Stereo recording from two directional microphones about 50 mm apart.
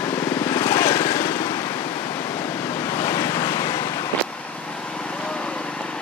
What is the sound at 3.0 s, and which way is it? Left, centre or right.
Vehicle, left.